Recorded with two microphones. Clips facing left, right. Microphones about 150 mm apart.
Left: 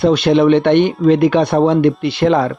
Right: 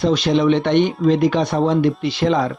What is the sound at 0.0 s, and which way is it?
Speech, 60° left (ahead or behind).